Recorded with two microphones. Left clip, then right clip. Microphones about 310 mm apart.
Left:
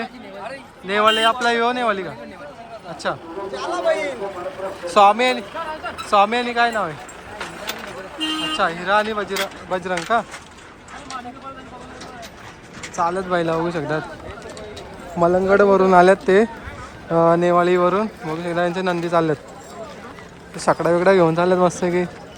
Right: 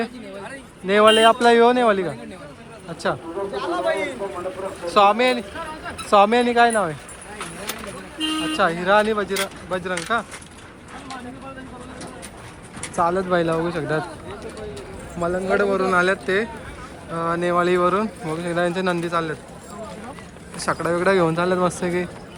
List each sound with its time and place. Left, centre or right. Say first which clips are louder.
0.9 s a man's voice: right 2 dB; centre
8.3 s speech: even; centre
13.0 s speech: right 1 dB; centre
15.2 s speech: left 6 dB; centre
20.6 s speech: left 5 dB; centre